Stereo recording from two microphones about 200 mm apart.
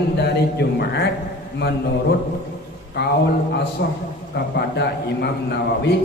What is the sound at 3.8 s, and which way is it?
A man's voice, 55° left (ahead or behind).